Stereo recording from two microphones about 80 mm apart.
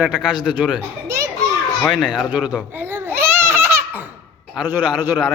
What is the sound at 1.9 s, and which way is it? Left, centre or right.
Speech, centre.